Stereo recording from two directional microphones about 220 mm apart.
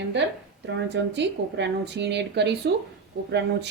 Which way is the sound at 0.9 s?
50° right (ahead or behind).